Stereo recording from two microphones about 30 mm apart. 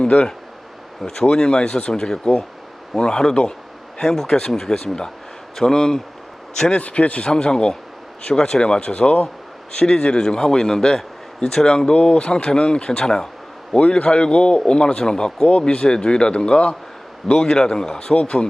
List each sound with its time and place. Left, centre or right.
1.0 s a man's voice: centre
6.7 s a man's voice: left
7.3 s a man's voice: left
8.6 s a man's voice: left
9.7 s a man's voice: left
11.9 s a man's voice: left
13.7 s a man's voice: left
15.4 s a man's voice: left
18.1 s a man's voice: left